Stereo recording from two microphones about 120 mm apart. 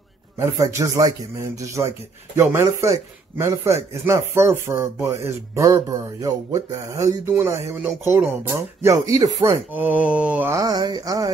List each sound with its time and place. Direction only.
0.4 s speech: 25° right (ahead or behind)
9.7 s mantra: 15° right (ahead or behind)
10.5 s speech: 30° right (ahead or behind)